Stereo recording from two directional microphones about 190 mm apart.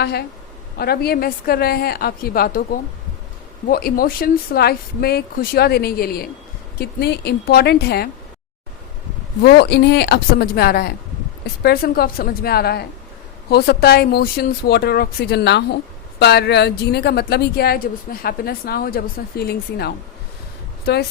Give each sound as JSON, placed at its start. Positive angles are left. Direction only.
{"t": 0.0, "sound": "a woman's voice", "side_deg": 60}
{"t": 3.7, "sound": "speech", "side_deg": 50}
{"t": 9.4, "sound": "a woman's voice", "side_deg": 60}